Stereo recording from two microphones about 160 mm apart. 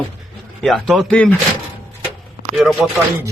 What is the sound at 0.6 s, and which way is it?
Speech, centre (ahead or behind).